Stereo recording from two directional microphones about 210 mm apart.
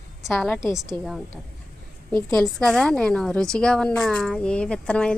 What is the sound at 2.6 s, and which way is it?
Speech, 5° left (ahead or behind).